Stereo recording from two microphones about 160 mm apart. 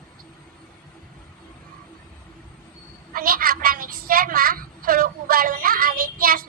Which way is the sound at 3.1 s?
65° right (ahead or behind).